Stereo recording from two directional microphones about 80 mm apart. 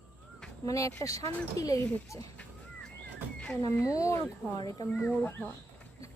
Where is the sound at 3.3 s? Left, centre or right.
Centre.